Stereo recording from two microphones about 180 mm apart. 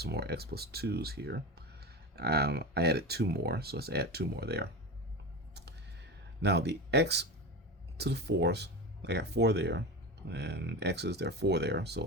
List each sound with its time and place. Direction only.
0.0 s speech: 65° right (ahead or behind)
6.4 s speech: 70° right (ahead or behind)